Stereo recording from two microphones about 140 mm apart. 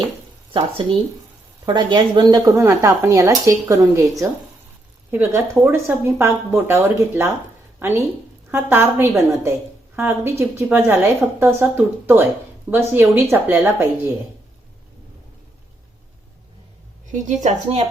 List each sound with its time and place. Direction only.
0.5 s a woman's voice: 40° right (ahead or behind); by 13.8 s 15° right (ahead or behind)
17.1 s a woman's voice: 60° right (ahead or behind)